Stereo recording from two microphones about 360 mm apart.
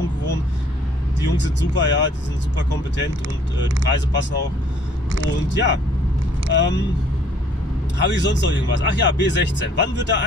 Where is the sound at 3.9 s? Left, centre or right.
Left.